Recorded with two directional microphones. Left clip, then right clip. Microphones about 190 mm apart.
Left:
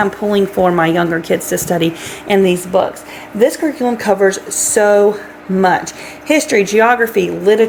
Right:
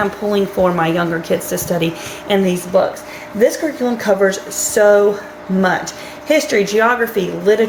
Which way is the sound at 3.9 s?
55° left (ahead or behind).